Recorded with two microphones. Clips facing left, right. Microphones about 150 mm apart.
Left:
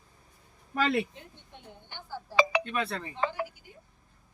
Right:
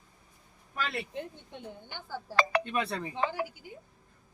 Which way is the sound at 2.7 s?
15° right (ahead or behind).